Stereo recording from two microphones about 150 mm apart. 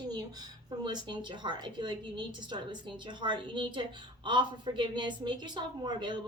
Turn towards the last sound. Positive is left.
turn(degrees=-30)  # may be behind; listen again after turning